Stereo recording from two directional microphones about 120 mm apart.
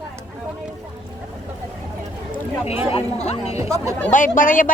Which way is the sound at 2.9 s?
65° left (ahead or behind).